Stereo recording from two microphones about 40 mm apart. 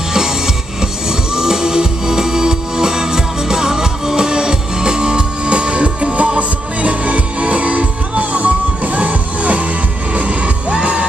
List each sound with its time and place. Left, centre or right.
1.3 s music: centre; by 10.5 s right